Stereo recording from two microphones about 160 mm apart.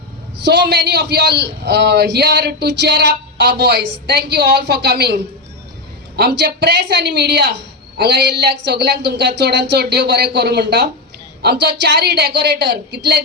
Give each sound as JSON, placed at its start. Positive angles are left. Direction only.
{"t": 0.4, "sound": "a man's voice", "side_deg": -90}